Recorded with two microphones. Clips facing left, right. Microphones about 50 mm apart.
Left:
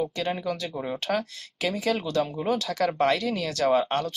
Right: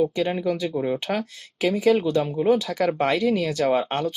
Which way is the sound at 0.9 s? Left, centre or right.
Centre.